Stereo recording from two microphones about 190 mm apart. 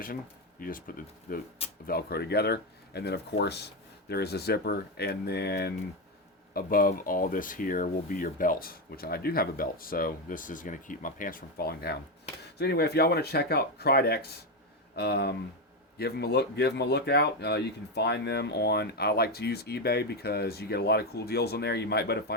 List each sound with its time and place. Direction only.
0.6 s speech: 45° left (ahead or behind)